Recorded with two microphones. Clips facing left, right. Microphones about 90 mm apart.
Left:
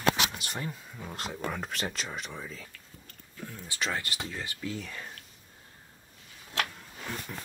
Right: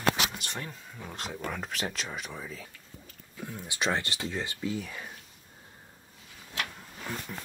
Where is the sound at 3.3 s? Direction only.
15° right (ahead or behind).